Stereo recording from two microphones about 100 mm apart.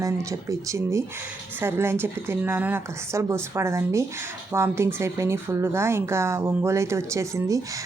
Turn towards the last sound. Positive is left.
turn(degrees=-30)  # may be behind; listen again after turning